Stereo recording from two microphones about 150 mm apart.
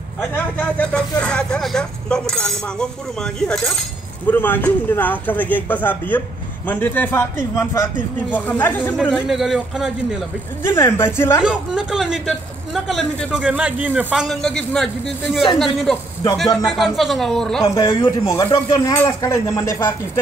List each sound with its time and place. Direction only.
0.3 s speech: 10° left (ahead or behind)
9.0 s speech: centre (ahead or behind)
10.6 s speech: 15° left (ahead or behind)
11.4 s speech: 5° right (ahead or behind)
14.3 s speech: 5° left (ahead or behind)
17.6 s speech: 25° left (ahead or behind)